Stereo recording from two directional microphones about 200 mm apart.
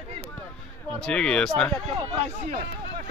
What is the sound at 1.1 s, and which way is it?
Speech, 5° left (ahead or behind).